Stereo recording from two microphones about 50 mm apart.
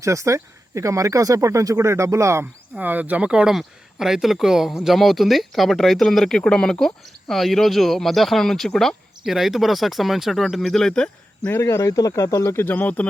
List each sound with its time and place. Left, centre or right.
0.0 s speech: right
2.8 s speech: right
3.5 s speech: centre
9.2 s speech: centre
11.6 s speech: left
12.7 s speech: left